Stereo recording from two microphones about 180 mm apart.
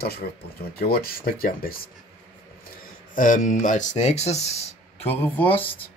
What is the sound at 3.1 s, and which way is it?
Speech, 45° left (ahead or behind).